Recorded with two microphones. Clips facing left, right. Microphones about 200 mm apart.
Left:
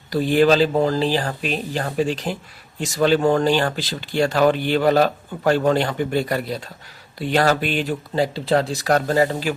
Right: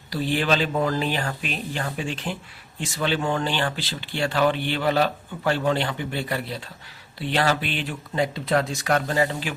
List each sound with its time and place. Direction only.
0.1 s speech: 45° left (ahead or behind)